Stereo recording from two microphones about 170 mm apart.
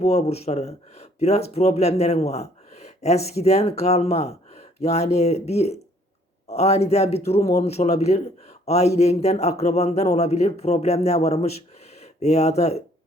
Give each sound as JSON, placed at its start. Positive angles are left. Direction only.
{"t": 0.0, "sound": "speech", "side_deg": 40}